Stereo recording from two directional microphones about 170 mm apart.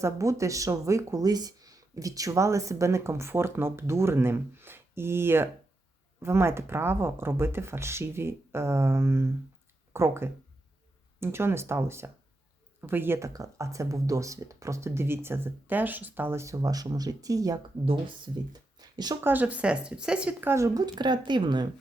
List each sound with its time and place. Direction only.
0.0 s speech: 20° right (ahead or behind)
18.5 s a sound: 25° right (ahead or behind)
19.2 s speech: 10° right (ahead or behind); by 21.7 s 25° right (ahead or behind)